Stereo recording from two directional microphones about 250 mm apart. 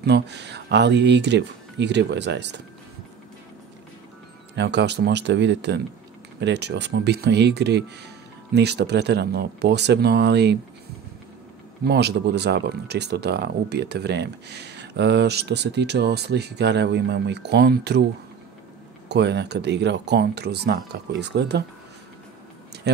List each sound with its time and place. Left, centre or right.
0.0 s speech: right
4.6 s speech: right
11.8 s speech: right
19.0 s speech: right